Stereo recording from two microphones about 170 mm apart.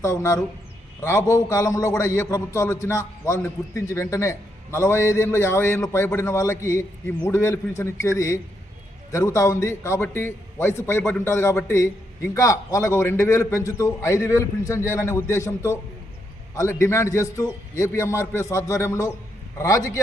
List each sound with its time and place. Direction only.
0.0 s a man's voice: 15° left (ahead or behind)
16.8 s a man's voice: 15° left (ahead or behind)